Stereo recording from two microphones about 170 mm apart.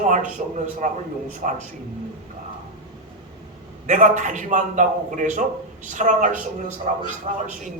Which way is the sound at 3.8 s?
45° right (ahead or behind).